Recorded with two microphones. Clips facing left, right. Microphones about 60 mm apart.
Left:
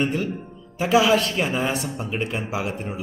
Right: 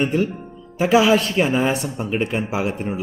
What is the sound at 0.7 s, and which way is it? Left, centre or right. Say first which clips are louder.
Speech: right 3 dB; right.